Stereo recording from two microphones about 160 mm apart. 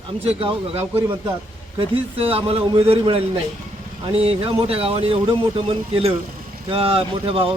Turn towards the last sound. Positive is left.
turn(degrees=-35)  # may be behind; listen again after turning